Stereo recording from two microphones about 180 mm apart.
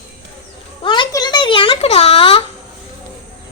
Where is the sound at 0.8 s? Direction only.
25° left (ahead or behind).